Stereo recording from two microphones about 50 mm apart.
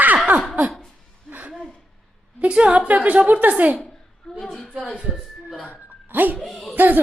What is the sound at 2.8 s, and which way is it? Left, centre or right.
Speech, right.